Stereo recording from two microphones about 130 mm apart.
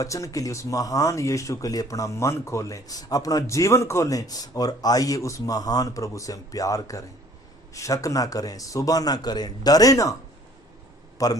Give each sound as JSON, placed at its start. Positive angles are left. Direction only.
{"t": 0.0, "sound": "speech", "side_deg": 25}
{"t": 11.2, "sound": "speech", "side_deg": 25}